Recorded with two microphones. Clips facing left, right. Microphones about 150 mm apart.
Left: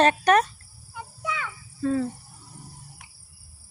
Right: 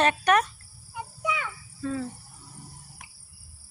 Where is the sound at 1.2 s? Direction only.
15° right (ahead or behind).